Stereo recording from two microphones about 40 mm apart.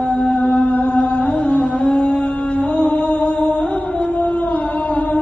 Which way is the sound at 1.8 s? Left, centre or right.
Left.